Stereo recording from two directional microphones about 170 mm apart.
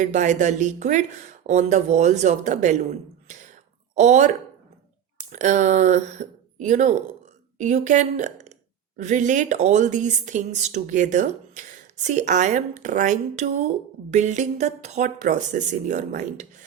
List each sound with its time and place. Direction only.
0.0 s a woman's voice: 45° right (ahead or behind)
3.2 s a sound: 45° right (ahead or behind)
5.3 s a woman's voice: 45° right (ahead or behind)